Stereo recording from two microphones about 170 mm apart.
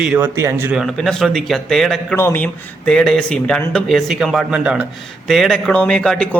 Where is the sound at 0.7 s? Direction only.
Centre (ahead or behind).